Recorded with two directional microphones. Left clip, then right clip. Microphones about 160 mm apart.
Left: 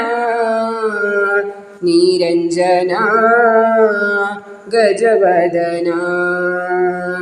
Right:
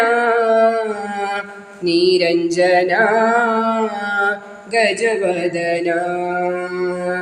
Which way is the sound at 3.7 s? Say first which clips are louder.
Left 8 dB; 35° right (ahead or behind).